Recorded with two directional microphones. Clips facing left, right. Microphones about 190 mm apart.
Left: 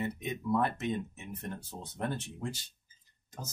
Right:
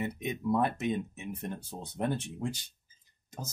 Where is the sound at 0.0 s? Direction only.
15° right (ahead or behind).